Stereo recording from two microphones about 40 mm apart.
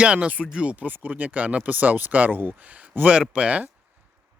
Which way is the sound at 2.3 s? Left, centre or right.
Right.